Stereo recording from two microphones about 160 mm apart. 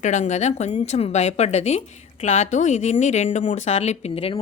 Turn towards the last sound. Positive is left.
turn(degrees=40)  # may be behind; listen again after turning